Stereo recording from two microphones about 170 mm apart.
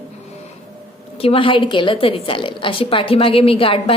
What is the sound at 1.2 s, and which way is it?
A woman's voice, 30° left (ahead or behind).